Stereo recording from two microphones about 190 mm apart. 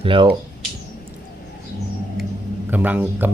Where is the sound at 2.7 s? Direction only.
10° right (ahead or behind).